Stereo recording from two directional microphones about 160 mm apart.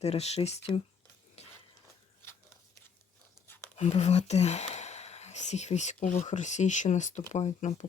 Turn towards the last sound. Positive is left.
turn(degrees=45)  # may be behind; listen again after turning